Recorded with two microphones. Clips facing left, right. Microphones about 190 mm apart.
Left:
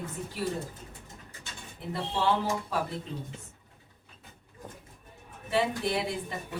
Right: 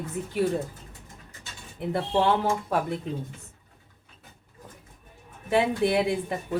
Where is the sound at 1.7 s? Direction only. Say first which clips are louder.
Right 7 dB; 55° right (ahead or behind).